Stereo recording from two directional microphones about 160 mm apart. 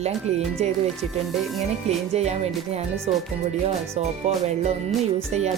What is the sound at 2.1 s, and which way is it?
Speech, 40° right (ahead or behind).